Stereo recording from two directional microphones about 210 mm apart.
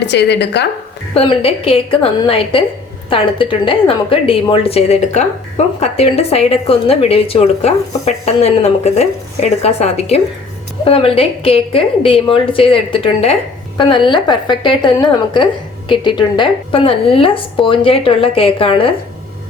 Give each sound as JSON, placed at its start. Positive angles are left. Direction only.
{"t": 0.0, "sound": "speech", "side_deg": 55}
{"t": 1.1, "sound": "a woman's voice", "side_deg": 25}